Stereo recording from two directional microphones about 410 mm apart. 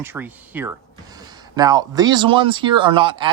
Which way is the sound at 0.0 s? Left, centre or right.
Centre.